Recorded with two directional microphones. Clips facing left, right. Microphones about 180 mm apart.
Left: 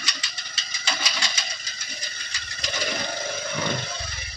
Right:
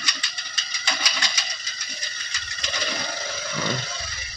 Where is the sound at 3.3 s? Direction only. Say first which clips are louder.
Right 2 dB; 55° left (ahead or behind).